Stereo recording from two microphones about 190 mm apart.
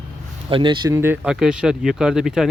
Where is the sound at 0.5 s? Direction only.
25° right (ahead or behind); by 2.5 s 5° right (ahead or behind).